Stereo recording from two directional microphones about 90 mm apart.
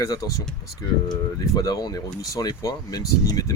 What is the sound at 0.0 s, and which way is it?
Speech, 40° left (ahead or behind).